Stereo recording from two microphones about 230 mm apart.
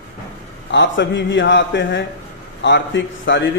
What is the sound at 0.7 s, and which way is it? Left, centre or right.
A man's voice, left.